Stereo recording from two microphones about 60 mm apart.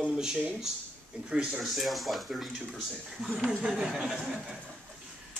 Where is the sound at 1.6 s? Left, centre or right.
Centre.